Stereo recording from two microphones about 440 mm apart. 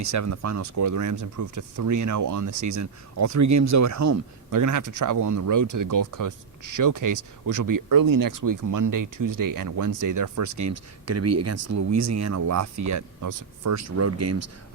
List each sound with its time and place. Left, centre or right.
0.0 s speech: right